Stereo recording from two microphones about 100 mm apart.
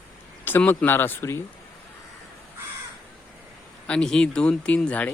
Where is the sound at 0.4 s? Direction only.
20° left (ahead or behind).